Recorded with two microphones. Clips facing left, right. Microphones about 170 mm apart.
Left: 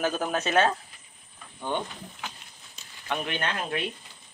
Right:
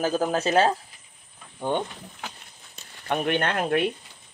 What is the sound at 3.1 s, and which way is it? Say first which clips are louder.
Speech: right 6 dB; 50° right (ahead or behind).